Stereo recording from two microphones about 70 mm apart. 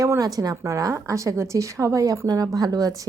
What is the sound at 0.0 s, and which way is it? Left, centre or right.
A woman's voice, right.